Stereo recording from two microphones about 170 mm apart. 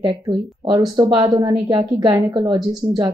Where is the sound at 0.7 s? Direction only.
20° right (ahead or behind).